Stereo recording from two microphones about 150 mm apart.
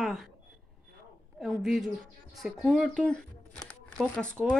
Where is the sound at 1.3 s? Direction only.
Centre (ahead or behind).